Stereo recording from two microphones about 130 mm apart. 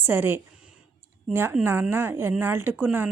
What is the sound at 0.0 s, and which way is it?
Speech, 15° right (ahead or behind).